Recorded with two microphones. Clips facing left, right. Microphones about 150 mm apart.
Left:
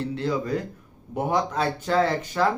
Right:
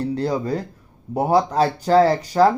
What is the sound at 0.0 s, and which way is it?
Speech, 40° right (ahead or behind).